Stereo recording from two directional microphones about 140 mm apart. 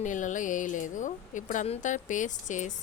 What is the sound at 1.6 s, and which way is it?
Speech, 55° left (ahead or behind).